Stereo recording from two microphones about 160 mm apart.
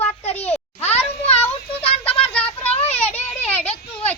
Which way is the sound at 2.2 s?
10° left (ahead or behind).